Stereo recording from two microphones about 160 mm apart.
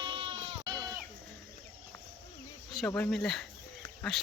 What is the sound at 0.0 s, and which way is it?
Bleat, 30° right (ahead or behind).